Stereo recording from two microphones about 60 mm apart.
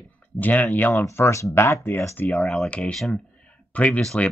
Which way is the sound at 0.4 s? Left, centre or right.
Left.